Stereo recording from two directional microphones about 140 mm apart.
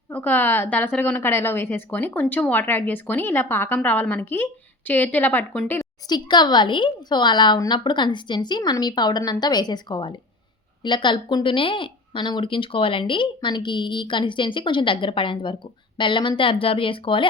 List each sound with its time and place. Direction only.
0.1 s a woman's voice: 15° left (ahead or behind)
6.1 s speech: 30° left (ahead or behind)